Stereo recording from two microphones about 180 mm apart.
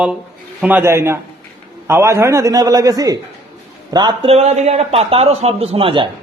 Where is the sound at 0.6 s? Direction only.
10° right (ahead or behind); by 6.1 s 30° right (ahead or behind).